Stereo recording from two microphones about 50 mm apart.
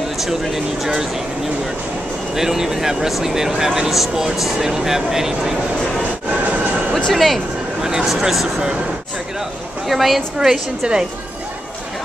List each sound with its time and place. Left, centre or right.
2.3 s speech: centre
6.4 s a sound: right
7.1 s speech: centre
9.8 s speech: centre